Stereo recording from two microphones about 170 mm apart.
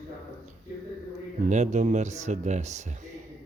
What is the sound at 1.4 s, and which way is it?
Speech, 45° right (ahead or behind).